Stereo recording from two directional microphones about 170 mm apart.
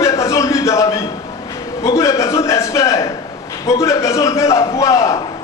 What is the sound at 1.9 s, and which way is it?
A man's voice, 15° left (ahead or behind).